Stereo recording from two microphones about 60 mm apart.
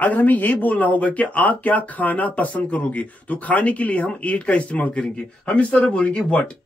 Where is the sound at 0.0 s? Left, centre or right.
Left.